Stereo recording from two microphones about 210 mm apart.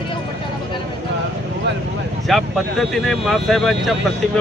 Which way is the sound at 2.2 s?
Centre (ahead or behind).